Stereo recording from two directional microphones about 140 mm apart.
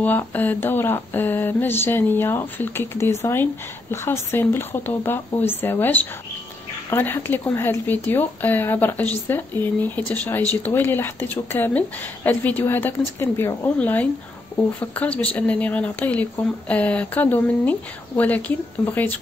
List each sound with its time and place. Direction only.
0.0 s speech: 15° left (ahead or behind)